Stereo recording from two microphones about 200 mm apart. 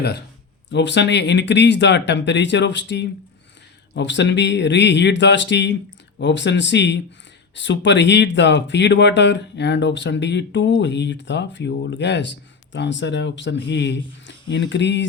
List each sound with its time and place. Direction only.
0.7 s speech: 60° left (ahead or behind)